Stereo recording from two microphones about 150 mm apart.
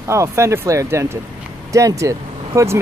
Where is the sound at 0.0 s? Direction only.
20° right (ahead or behind).